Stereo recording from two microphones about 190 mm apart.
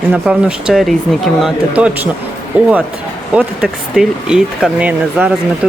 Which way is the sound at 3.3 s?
5° right (ahead or behind).